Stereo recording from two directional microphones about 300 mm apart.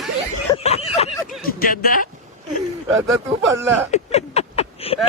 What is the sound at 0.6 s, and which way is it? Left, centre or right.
Speech, left.